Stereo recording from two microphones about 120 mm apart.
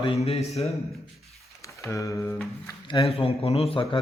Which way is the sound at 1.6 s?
25° left (ahead or behind).